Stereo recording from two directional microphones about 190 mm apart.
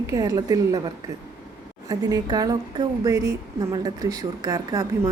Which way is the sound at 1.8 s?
20° right (ahead or behind).